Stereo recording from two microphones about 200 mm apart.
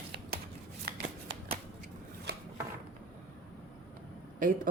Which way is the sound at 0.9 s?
50° right (ahead or behind).